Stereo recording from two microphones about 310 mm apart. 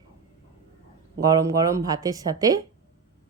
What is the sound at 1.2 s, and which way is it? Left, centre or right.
Speech, centre.